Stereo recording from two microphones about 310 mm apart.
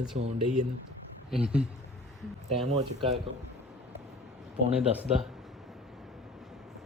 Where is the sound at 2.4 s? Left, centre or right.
Right.